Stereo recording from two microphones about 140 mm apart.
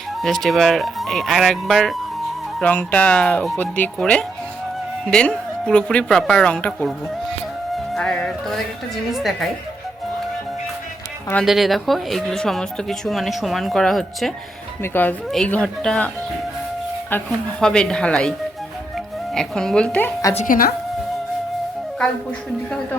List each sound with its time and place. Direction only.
0.2 s speech: 5° left (ahead or behind)
7.9 s speech: 5° left (ahead or behind)
11.4 s speech: centre (ahead or behind)
14.8 s speech: 15° left (ahead or behind)
17.6 s speech: 5° left (ahead or behind)
20.3 s a woman's voice: 70° left (ahead or behind)